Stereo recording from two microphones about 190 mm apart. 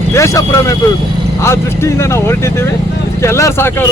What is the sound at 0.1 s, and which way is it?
Speech, 15° left (ahead or behind).